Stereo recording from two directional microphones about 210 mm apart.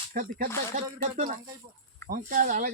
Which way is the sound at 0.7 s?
40° right (ahead or behind).